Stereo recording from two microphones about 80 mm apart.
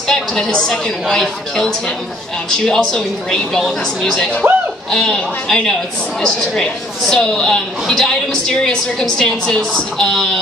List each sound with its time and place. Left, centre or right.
0.1 s a woman's voice: centre